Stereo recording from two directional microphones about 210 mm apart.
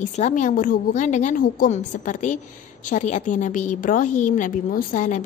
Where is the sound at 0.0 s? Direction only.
35° left (ahead or behind).